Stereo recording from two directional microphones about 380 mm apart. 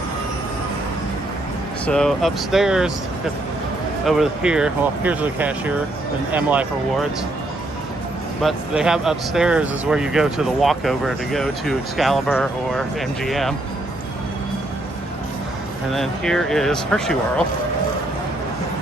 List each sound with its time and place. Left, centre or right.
1.9 s speech: centre
4.0 s speech: centre
8.4 s speech: centre
15.9 s speech: centre